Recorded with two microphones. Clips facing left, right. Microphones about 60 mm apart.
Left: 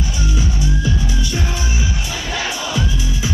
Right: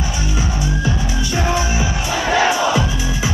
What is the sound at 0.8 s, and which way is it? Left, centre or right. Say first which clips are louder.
Music: right 1 dB; right.